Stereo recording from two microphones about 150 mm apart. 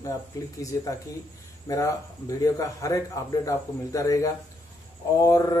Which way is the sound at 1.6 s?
20° left (ahead or behind).